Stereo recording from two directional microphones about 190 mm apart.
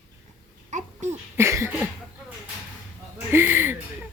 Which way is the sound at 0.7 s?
40° right (ahead or behind).